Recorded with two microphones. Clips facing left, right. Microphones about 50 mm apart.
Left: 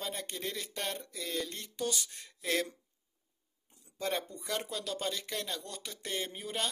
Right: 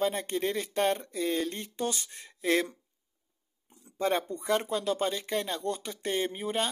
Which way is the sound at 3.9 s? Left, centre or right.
Right.